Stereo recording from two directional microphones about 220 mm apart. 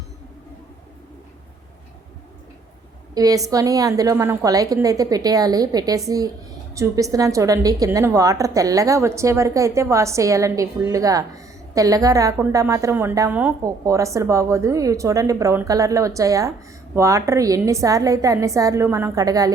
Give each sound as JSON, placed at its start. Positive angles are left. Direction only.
{"t": 3.2, "sound": "a woman's voice", "side_deg": -15}